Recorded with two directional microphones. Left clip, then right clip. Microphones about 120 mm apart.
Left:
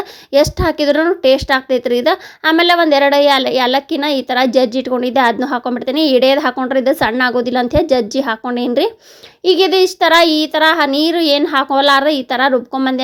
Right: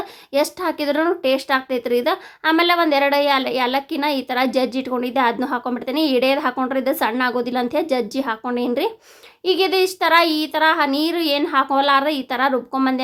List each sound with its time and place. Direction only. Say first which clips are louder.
0.3 s speech: left 7 dB; 50° left (ahead or behind)